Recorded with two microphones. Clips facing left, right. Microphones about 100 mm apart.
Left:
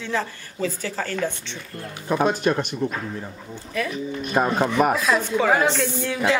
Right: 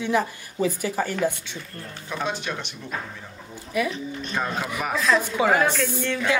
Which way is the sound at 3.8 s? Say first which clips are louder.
Right 2 dB; 15° right (ahead or behind).